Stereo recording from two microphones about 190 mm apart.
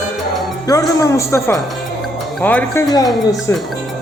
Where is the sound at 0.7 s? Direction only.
15° left (ahead or behind).